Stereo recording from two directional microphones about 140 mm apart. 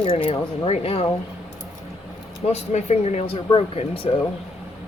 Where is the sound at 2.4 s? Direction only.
50° left (ahead or behind).